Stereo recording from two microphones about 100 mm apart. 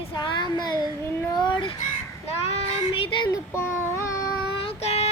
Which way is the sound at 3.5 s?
25° left (ahead or behind).